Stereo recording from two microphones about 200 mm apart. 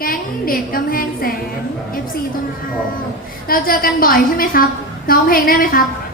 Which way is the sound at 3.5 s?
45° left (ahead or behind).